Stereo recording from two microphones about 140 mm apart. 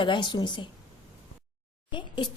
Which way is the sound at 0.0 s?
35° left (ahead or behind).